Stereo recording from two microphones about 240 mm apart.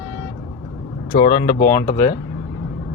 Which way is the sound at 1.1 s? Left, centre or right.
Centre.